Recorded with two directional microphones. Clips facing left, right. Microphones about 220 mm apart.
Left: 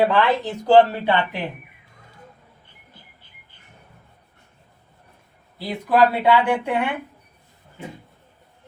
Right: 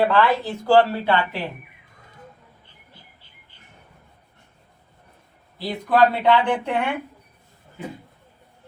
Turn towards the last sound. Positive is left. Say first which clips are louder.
# left 1 dB
turn(degrees=10)  # may be behind; listen again after turning